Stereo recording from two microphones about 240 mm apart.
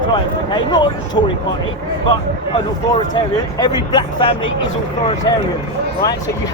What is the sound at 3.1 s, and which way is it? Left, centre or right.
Speech, centre.